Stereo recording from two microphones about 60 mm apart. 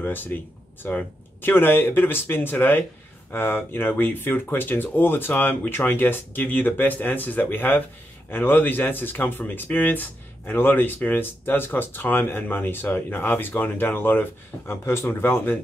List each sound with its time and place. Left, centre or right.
0.0 s speech: left